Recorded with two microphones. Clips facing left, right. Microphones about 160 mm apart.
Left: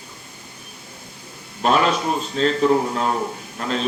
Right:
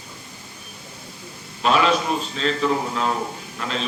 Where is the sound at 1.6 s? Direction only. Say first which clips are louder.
Left 1 dB; 45° left (ahead or behind).